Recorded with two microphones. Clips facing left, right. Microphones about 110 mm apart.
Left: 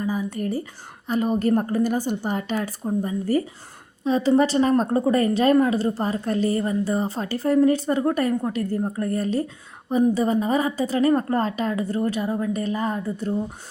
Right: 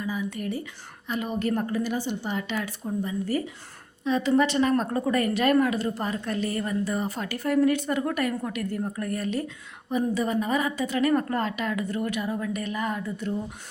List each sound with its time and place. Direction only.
0.0 s a woman's voice: 40° left (ahead or behind)